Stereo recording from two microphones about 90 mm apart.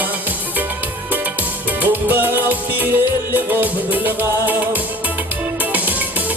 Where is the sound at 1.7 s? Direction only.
20° right (ahead or behind).